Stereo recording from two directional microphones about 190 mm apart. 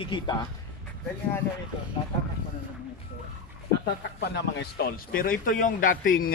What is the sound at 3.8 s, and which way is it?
Speech, 60° left (ahead or behind).